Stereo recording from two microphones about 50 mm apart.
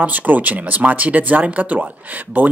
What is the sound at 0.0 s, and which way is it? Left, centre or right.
Speech, right.